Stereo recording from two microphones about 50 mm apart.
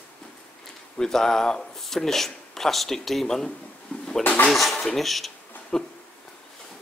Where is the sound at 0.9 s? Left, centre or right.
Centre.